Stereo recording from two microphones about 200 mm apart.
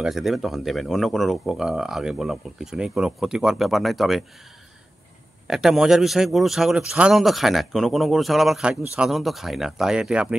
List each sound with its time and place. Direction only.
0.0 s speech: centre (ahead or behind)
5.5 s speech: centre (ahead or behind)